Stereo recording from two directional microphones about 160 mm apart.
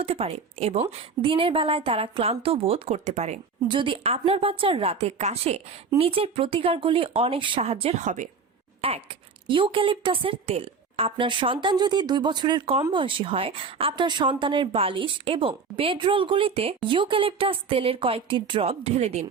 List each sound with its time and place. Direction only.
0.0 s a woman's voice: 40° right (ahead or behind)
3.7 s a woman's voice: 30° right (ahead or behind); by 8.3 s 50° right (ahead or behind)
9.5 s a woman's voice: 30° right (ahead or behind)